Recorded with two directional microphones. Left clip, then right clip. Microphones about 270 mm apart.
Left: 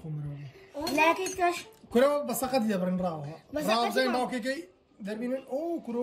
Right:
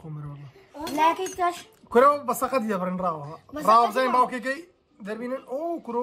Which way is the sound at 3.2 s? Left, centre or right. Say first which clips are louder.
Even; centre.